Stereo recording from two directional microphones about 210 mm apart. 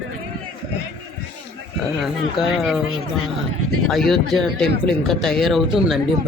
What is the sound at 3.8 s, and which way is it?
Speech, centre (ahead or behind).